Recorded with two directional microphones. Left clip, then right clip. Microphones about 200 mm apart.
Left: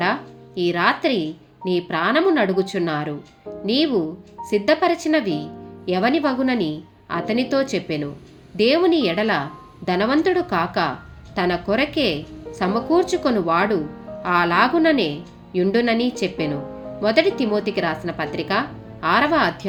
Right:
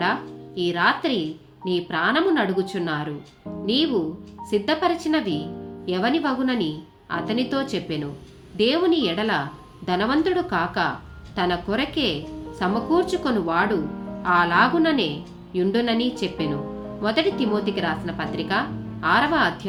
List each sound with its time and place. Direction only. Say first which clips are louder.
0.0 s a woman's voice: left 2 dB; 20° left (ahead or behind)